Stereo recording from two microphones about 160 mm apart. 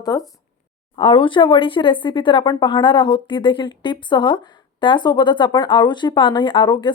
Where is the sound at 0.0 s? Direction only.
25° left (ahead or behind).